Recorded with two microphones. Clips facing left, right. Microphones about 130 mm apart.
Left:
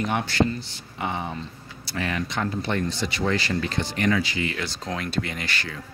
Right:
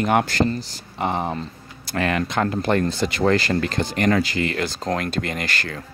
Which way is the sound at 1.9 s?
65° right (ahead or behind).